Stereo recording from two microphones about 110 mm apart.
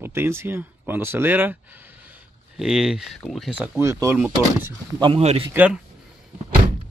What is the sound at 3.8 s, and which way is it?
Speech, 25° right (ahead or behind).